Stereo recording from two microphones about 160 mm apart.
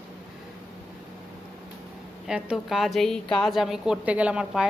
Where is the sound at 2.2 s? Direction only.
5° right (ahead or behind).